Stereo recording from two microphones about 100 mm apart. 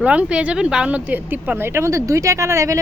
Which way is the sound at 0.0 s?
10° right (ahead or behind).